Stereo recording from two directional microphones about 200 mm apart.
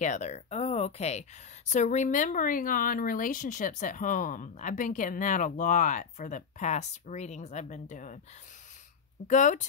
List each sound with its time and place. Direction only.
0.0 s speech: 35° left (ahead or behind)
9.3 s speech: 40° left (ahead or behind)